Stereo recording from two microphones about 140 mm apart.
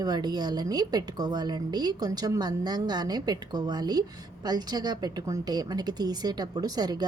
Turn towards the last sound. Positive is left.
turn(degrees=-30)  # may be behind; listen again after turning